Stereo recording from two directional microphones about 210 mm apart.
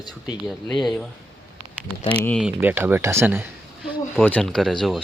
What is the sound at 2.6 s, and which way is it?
Speech, 10° right (ahead or behind).